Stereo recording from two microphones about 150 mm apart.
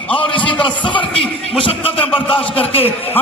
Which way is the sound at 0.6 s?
35° left (ahead or behind).